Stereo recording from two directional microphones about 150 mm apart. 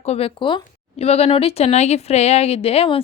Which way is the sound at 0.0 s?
45° left (ahead or behind).